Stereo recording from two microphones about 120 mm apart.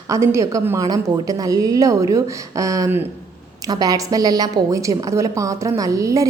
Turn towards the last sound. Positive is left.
turn(degrees=-25)  # may be behind; listen again after turning